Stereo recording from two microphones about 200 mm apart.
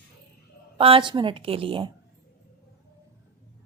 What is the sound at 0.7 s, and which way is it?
A woman's voice, 25° right (ahead or behind).